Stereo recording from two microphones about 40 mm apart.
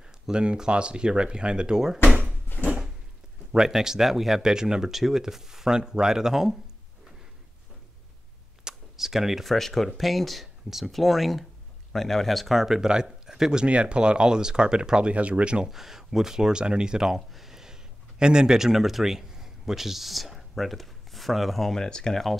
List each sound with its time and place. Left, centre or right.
0.3 s speech: right
2.5 s drawer open or close: left
3.5 s speech: centre
8.6 s a sound: centre
9.5 s speech: centre
12.5 s speech: centre
13.7 s speech: right
15.1 s speech: right
15.7 s speech: centre
17.1 s a sound: centre
18.2 s a man's voice: centre
21.8 s speech: centre